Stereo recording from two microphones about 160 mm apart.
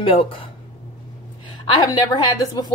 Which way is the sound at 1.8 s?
25° left (ahead or behind).